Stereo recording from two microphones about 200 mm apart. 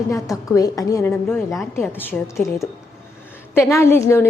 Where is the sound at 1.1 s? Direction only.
Centre (ahead or behind).